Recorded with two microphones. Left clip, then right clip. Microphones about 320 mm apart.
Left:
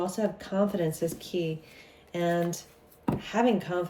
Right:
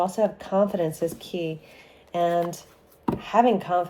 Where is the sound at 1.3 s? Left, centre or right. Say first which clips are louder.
Right 2 dB; centre.